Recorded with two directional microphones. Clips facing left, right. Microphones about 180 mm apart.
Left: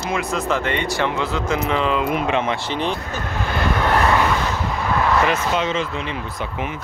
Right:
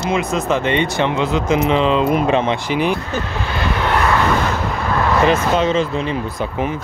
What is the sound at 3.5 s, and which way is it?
Vehicle, 50° left (ahead or behind).